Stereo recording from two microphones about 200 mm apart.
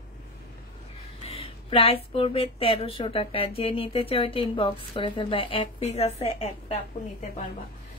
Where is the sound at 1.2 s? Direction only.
30° left (ahead or behind).